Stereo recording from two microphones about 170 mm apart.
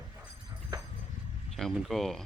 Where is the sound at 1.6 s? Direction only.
Centre (ahead or behind).